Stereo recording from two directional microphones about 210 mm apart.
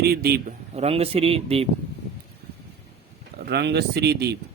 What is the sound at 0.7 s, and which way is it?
Speech, 30° right (ahead or behind).